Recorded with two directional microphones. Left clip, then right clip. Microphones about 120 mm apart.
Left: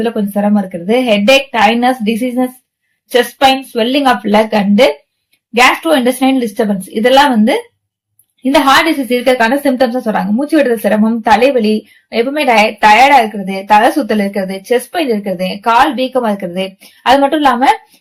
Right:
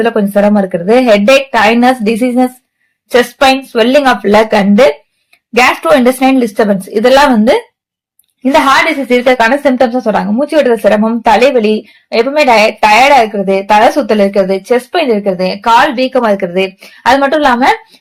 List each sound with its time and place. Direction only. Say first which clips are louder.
0.0 s a woman's voice: right 6 dB; 40° right (ahead or behind)
6.1 s a woman's voice: right 4 dB; 40° right (ahead or behind)
8.6 s a woman's voice: right 1 dB; 25° right (ahead or behind)